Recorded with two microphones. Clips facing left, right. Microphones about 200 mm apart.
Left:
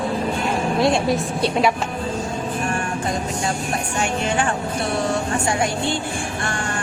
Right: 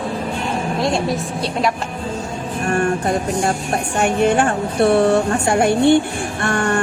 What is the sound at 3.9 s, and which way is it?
Speech, 55° right (ahead or behind).